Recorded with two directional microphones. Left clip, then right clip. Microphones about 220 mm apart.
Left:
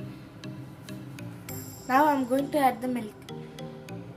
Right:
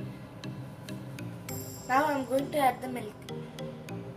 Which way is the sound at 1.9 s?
30° left (ahead or behind).